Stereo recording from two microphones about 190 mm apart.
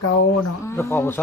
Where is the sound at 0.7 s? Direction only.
15° left (ahead or behind).